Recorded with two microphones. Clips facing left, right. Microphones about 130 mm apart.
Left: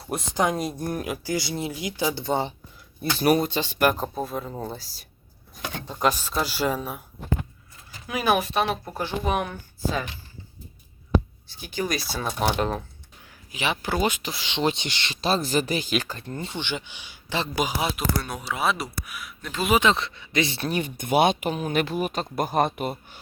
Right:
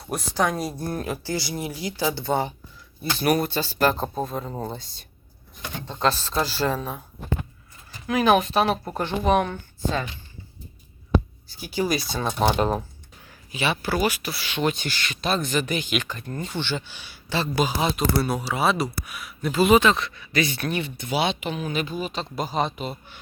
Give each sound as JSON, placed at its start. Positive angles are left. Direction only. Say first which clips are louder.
{"t": 0.1, "sound": "speech", "louder": "even", "side_deg": 20}
{"t": 3.0, "sound": "speech", "louder": "left 1 dB", "side_deg": 40}
{"t": 3.3, "sound": "speech", "louder": "even", "side_deg": 15}
{"t": 4.1, "sound": "speech", "louder": "right 1 dB", "side_deg": 0}
{"t": 8.0, "sound": "speech", "louder": "right 4 dB", "side_deg": 10}
{"t": 11.4, "sound": "speech", "louder": "right 3 dB", "side_deg": -5}
{"t": 13.5, "sound": "speech", "louder": "right 2 dB", "side_deg": 15}
{"t": 16.6, "sound": "speech", "louder": "right 3 dB", "side_deg": 15}
{"t": 18.2, "sound": "speech", "louder": "right 4 dB", "side_deg": -5}
{"t": 19.8, "sound": "speech", "louder": "right 1 dB", "side_deg": 25}
{"t": 21.0, "sound": "speech", "louder": "left 6 dB", "side_deg": 50}
{"t": 21.7, "sound": "speech", "louder": "left 5 dB", "side_deg": 65}
{"t": 22.1, "sound": "speech", "louder": "left 3 dB", "side_deg": 50}